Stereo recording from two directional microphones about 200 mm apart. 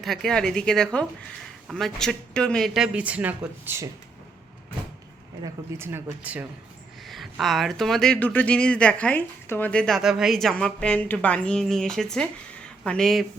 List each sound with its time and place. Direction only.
0.0 s speech: centre (ahead or behind)
5.4 s speech: 10° right (ahead or behind)